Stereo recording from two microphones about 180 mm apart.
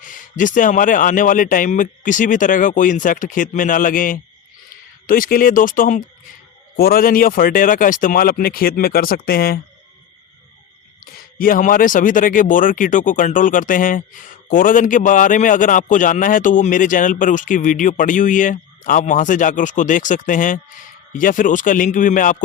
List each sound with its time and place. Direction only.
0.0 s speech: 45° left (ahead or behind)
11.0 s speech: 50° left (ahead or behind)